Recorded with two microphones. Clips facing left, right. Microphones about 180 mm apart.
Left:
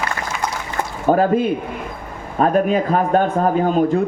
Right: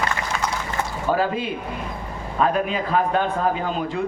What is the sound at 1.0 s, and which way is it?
A man's voice, 50° left (ahead or behind).